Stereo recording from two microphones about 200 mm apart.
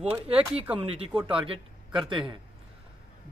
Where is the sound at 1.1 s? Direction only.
5° right (ahead or behind).